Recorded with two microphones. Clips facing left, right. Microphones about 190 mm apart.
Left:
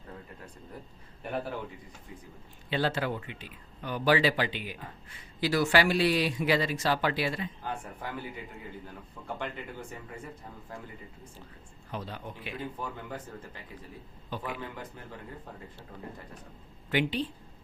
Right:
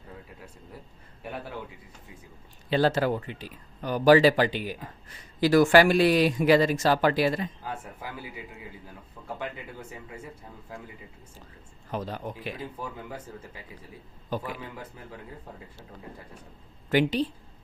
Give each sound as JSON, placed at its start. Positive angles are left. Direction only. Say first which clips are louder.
{"t": 1.2, "sound": "a man's voice", "louder": "left 3 dB", "side_deg": 0}
{"t": 2.6, "sound": "speech", "louder": "right 6 dB", "side_deg": -40}
{"t": 11.9, "sound": "speech", "louder": "right 6 dB", "side_deg": -45}
{"t": 14.3, "sound": "speech", "louder": "right 6 dB", "side_deg": -45}
{"t": 16.9, "sound": "speech", "louder": "right 5 dB", "side_deg": -40}